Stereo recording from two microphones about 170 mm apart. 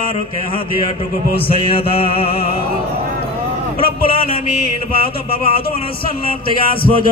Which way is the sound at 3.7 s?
35° left (ahead or behind).